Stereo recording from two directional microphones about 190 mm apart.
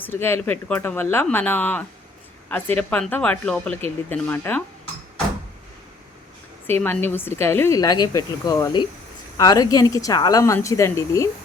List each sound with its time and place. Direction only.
0.0 s speech: 10° left (ahead or behind)
6.8 s speech: 10° left (ahead or behind)